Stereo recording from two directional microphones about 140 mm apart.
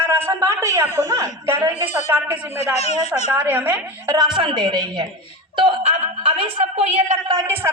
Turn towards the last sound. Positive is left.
turn(degrees=-15)  # may be behind; listen again after turning